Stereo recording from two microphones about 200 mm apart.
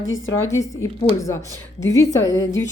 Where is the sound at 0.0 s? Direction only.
75° left (ahead or behind).